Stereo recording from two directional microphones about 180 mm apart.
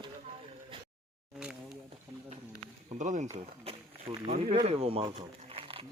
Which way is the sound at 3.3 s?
35° right (ahead or behind).